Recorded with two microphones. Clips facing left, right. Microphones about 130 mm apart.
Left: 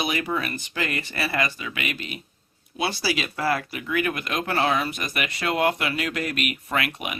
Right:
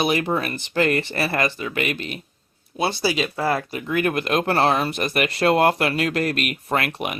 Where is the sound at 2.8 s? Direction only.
25° right (ahead or behind).